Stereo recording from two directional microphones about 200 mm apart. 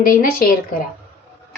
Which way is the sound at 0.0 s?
45° left (ahead or behind).